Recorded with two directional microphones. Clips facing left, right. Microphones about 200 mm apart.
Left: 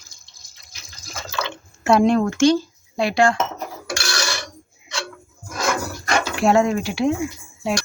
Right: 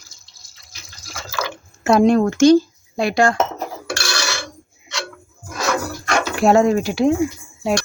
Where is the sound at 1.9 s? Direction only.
40° right (ahead or behind).